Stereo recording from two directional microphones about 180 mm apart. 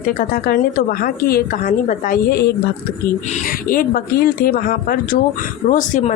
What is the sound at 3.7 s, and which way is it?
A woman's voice, 55° left (ahead or behind).